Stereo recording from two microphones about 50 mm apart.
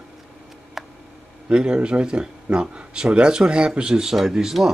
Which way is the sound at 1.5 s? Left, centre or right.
Centre.